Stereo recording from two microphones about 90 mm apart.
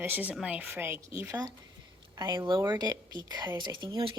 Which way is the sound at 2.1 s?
45° right (ahead or behind).